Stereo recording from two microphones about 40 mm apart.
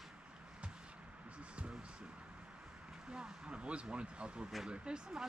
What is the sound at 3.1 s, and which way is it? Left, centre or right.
Vehicle, right.